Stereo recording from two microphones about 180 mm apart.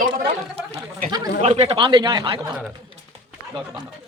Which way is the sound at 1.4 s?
35° right (ahead or behind).